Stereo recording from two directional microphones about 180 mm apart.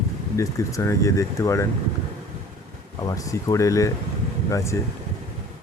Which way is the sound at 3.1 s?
20° left (ahead or behind).